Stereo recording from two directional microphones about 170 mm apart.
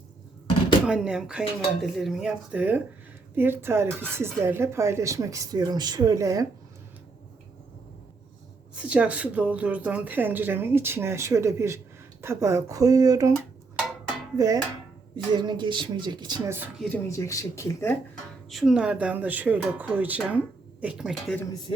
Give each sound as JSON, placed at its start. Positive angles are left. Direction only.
{"t": 0.9, "sound": "speech", "side_deg": -5}
{"t": 8.8, "sound": "speech", "side_deg": -5}
{"t": 16.5, "sound": "speech", "side_deg": -10}
{"t": 17.1, "sound": "speech", "side_deg": 20}
{"t": 18.1, "sound": "speech", "side_deg": 0}